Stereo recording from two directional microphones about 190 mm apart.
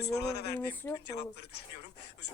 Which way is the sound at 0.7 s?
10° left (ahead or behind).